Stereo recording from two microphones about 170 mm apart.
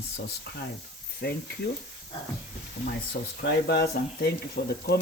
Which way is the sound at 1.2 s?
70° left (ahead or behind).